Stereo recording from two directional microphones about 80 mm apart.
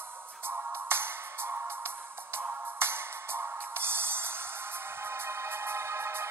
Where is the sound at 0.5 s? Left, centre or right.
Right.